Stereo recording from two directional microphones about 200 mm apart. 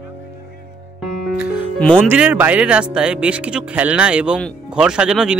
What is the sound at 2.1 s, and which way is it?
Speech, 10° right (ahead or behind).